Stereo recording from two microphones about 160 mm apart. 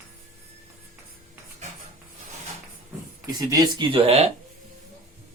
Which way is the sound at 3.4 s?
25° right (ahead or behind).